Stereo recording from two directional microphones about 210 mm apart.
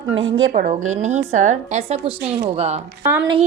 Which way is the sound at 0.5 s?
35° right (ahead or behind).